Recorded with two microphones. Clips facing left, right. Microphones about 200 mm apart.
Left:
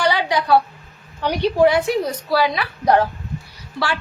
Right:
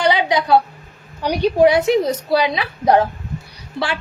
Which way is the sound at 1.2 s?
15° right (ahead or behind).